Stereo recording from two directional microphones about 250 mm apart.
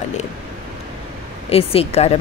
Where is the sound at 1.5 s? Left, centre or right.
Left.